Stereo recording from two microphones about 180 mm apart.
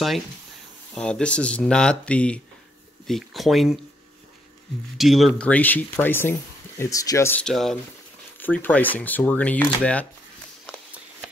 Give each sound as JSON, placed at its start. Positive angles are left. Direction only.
{"t": 0.9, "sound": "speech", "side_deg": 5}
{"t": 4.9, "sound": "speech", "side_deg": 0}